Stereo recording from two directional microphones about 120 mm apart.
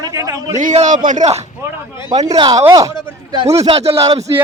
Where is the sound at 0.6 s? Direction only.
90° right.